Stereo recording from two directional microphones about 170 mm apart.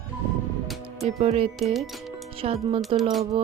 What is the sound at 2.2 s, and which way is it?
Speech, 35° right (ahead or behind).